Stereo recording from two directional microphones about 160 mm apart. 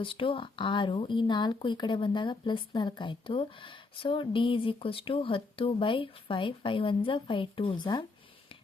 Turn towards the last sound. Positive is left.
turn(degrees=30)  # may be behind; listen again after turning